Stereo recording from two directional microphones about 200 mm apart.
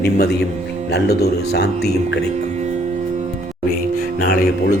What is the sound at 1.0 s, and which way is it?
Speech, 55° left (ahead or behind).